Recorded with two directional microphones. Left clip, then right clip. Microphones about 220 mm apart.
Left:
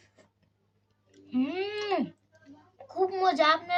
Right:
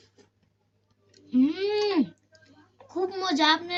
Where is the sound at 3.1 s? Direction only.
20° left (ahead or behind).